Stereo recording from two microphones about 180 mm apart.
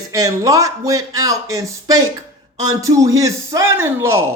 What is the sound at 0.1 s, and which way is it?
Speech, 20° right (ahead or behind).